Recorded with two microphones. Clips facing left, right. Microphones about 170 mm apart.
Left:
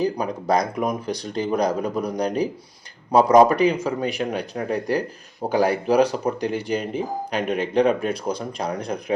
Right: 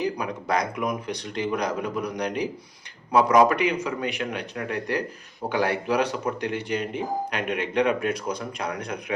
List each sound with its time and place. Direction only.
0.0 s a man's voice: 35° left (ahead or behind)